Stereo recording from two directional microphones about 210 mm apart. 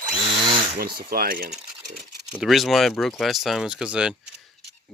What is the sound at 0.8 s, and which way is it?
Speech, 45° right (ahead or behind).